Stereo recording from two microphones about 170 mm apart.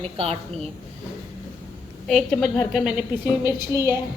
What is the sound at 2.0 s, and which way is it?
A woman's voice, centre (ahead or behind).